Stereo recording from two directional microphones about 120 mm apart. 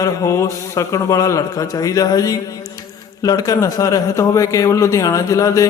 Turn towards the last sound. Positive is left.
turn(degrees=25)  # may be behind; listen again after turning